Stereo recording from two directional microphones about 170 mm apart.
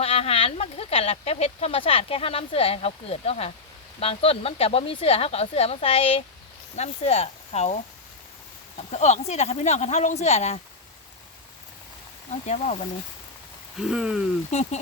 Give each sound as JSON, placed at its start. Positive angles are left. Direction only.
{"t": 0.0, "sound": "speech", "side_deg": 35}
{"t": 8.9, "sound": "speech", "side_deg": 40}
{"t": 13.8, "sound": "speech", "side_deg": 0}
{"t": 14.5, "sound": "speech", "side_deg": 40}